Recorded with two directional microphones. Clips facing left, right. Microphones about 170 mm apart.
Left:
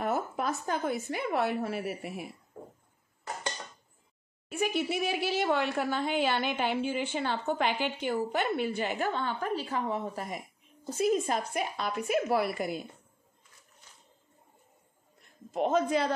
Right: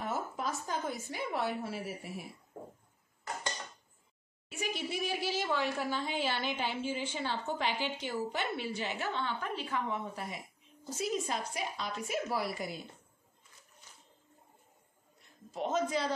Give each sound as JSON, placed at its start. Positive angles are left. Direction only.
{"t": 0.0, "sound": "speech", "side_deg": 60}
{"t": 4.5, "sound": "speech", "side_deg": 60}
{"t": 10.9, "sound": "speech", "side_deg": 55}
{"t": 15.5, "sound": "speech", "side_deg": 60}